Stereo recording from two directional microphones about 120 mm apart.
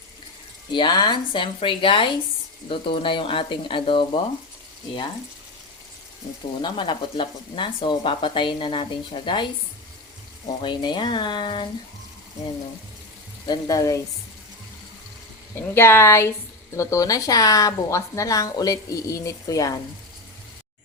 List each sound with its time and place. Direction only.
0.7 s a woman's voice: 40° left (ahead or behind)
6.6 s a woman's voice: 45° left (ahead or behind)
13.5 s a woman's voice: 30° left (ahead or behind)
15.5 s a woman's voice: 20° left (ahead or behind)